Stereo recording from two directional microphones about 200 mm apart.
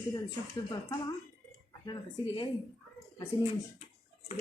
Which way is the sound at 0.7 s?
20° left (ahead or behind).